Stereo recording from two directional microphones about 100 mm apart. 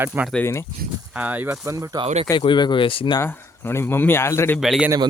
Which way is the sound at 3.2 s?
25° left (ahead or behind).